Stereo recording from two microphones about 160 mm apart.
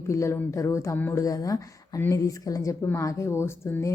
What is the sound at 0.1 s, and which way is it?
Speech, 20° left (ahead or behind).